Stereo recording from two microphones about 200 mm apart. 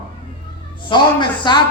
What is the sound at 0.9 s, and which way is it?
Speech, 20° left (ahead or behind).